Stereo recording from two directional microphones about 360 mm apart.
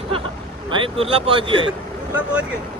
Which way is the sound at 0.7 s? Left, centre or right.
Centre.